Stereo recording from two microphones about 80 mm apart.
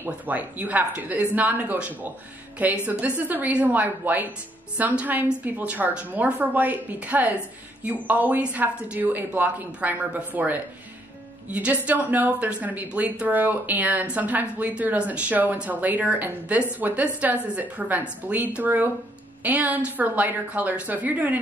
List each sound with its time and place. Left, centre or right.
0.0 s speech: right